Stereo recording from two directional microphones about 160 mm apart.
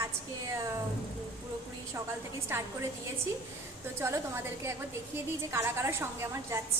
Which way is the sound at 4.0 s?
15° right (ahead or behind).